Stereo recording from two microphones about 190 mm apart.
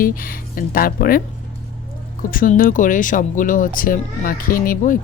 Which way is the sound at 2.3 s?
45° left (ahead or behind).